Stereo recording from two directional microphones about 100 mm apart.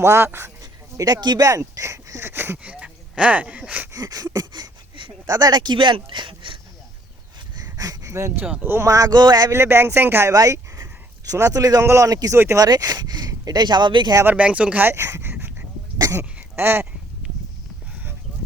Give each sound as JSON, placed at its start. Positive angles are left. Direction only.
{"t": 0.0, "sound": "speech", "side_deg": -25}
{"t": 0.6, "sound": "speech", "side_deg": -35}
{"t": 3.9, "sound": "speech", "side_deg": -40}
{"t": 4.4, "sound": "a sound", "side_deg": -40}
{"t": 5.2, "sound": "speech", "side_deg": -40}
{"t": 7.6, "sound": "a sound", "side_deg": -35}
{"t": 8.6, "sound": "speech", "side_deg": -20}
{"t": 8.9, "sound": "speech", "side_deg": -35}
{"t": 9.5, "sound": "speech", "side_deg": -25}
{"t": 10.3, "sound": "speech", "side_deg": -35}
{"t": 14.3, "sound": "speech", "side_deg": -15}
{"t": 16.0, "sound": "a sound", "side_deg": -25}